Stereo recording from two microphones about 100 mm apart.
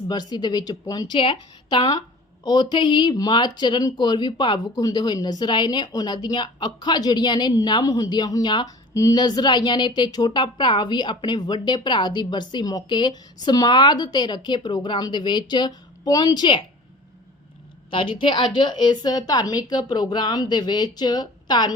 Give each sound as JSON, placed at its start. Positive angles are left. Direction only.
{"t": 0.1, "sound": "speech", "side_deg": 45}
{"t": 17.9, "sound": "speech", "side_deg": 55}